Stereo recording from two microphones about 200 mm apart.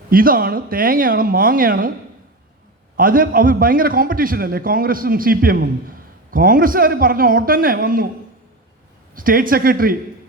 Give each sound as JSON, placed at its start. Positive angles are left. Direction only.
{"t": 0.1, "sound": "a man's voice", "side_deg": -45}
{"t": 3.0, "sound": "a man's voice", "side_deg": -45}
{"t": 9.1, "sound": "a man's voice", "side_deg": -45}